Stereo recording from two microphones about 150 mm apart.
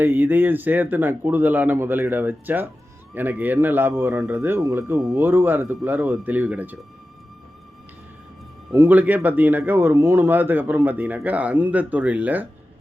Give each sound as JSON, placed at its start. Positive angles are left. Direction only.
{"t": 0.0, "sound": "speech", "side_deg": -10}
{"t": 8.7, "sound": "speech", "side_deg": -15}